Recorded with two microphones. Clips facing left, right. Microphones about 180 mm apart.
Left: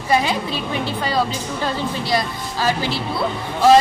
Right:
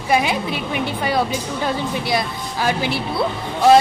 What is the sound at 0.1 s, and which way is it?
A woman's voice, 15° right (ahead or behind).